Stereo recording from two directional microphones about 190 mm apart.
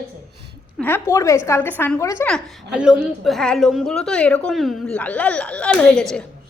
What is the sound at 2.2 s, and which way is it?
A woman's voice, centre (ahead or behind).